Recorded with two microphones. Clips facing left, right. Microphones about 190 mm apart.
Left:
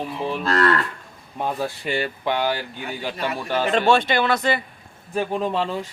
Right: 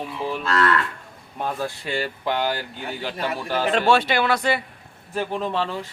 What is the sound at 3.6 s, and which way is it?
Speech, 5° right (ahead or behind).